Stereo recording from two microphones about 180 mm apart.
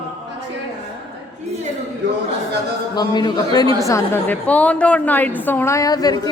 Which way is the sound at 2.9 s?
25° left (ahead or behind).